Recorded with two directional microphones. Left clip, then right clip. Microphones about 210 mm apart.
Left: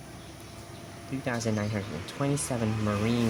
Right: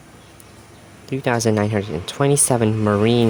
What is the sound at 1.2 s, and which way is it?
Speech, 50° right (ahead or behind).